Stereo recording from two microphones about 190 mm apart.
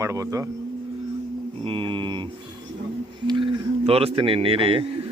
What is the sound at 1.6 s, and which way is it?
A man's voice, 25° right (ahead or behind).